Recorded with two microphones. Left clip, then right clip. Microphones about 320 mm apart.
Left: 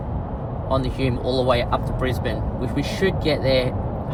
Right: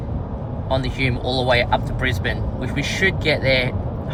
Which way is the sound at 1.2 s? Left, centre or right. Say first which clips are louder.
Right 1 dB; right.